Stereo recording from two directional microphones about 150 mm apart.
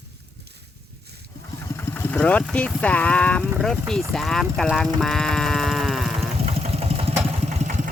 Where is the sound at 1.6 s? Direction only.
20° left (ahead or behind).